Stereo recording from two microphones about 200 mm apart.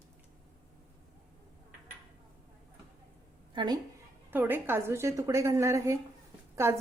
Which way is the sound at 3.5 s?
20° right (ahead or behind).